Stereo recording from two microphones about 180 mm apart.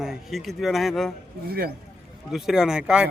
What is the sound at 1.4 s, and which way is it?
Speech, 55° right (ahead or behind).